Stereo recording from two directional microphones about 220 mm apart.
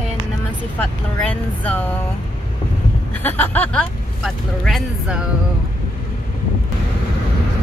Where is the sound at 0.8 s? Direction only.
5° left (ahead or behind).